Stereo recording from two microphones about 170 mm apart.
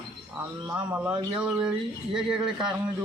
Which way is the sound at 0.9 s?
10° right (ahead or behind).